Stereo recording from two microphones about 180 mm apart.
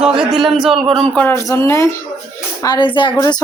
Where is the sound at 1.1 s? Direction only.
10° left (ahead or behind).